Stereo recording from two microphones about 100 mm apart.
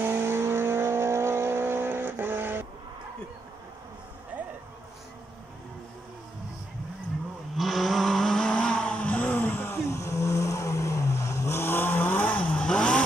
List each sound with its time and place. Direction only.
0.0 s vehicle: 25° right (ahead or behind)
7.5 s vehicle: centre (ahead or behind)